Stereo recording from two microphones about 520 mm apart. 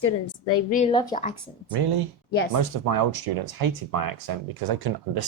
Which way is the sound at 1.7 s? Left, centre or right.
Right.